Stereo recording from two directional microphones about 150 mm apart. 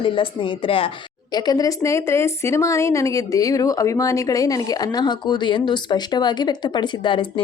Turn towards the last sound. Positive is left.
turn(degrees=35)  # may be behind; listen again after turning